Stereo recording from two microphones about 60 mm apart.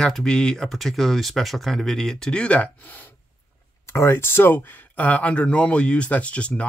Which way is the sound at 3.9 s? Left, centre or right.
Left.